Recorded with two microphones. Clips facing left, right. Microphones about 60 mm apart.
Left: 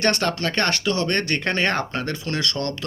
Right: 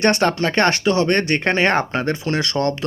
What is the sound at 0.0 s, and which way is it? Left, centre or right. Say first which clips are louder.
Speech: right 5 dB; right.